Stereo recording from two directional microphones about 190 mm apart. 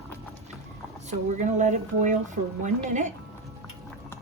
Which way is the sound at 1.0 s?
40° right (ahead or behind).